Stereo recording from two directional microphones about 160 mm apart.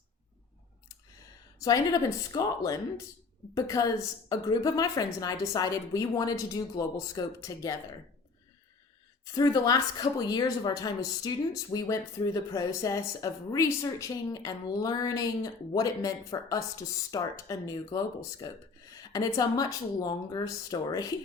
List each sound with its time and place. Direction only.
1.5 s a woman's voice: 20° left (ahead or behind)
9.2 s a woman's voice: 25° left (ahead or behind)